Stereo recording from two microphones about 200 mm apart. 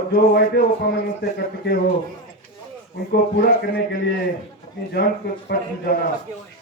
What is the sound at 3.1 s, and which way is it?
A man's voice, 50° left (ahead or behind).